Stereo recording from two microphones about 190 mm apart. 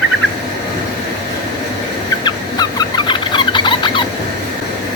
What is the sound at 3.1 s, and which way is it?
Squeal, 25° left (ahead or behind).